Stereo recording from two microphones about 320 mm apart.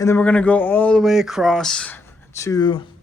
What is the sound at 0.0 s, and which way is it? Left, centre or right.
A man's voice, centre.